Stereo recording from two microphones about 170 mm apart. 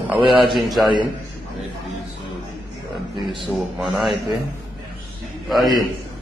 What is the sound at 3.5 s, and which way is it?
Speech, centre (ahead or behind).